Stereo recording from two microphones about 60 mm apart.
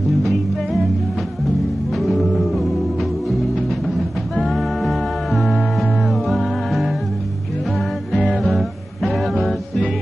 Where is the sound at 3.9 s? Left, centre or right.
Centre.